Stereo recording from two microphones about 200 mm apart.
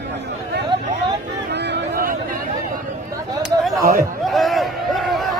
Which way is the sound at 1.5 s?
60° right (ahead or behind).